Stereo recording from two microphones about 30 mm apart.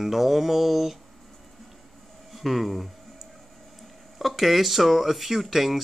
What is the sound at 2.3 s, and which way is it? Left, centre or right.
Speech, centre.